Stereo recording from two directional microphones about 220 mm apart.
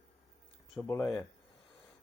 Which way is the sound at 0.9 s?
15° left (ahead or behind).